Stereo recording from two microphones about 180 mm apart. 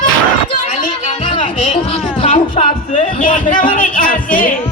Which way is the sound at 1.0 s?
30° left (ahead or behind).